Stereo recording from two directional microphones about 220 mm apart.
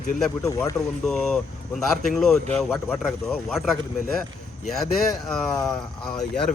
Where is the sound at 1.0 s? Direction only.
Centre (ahead or behind).